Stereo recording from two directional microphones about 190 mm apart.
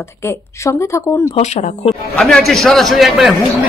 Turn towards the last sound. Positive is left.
turn(degrees=0)  # may be behind; listen again after turning